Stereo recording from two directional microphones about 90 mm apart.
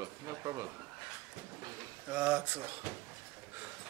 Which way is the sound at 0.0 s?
35° right (ahead or behind).